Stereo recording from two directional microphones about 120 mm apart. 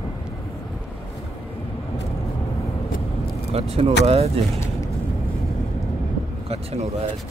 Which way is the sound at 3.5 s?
60° right (ahead or behind).